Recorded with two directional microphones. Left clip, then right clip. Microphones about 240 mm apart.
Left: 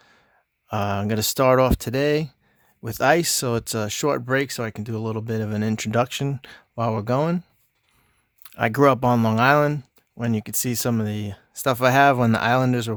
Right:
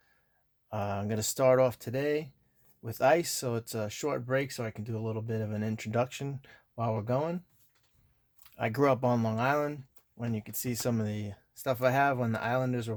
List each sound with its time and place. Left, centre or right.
0.7 s speech: left
8.4 s speech: left